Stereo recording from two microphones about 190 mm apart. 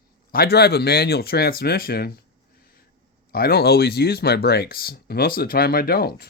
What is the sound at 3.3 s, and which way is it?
Speech, 50° left (ahead or behind).